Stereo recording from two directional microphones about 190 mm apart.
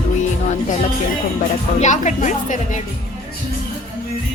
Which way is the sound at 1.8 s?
40° left (ahead or behind).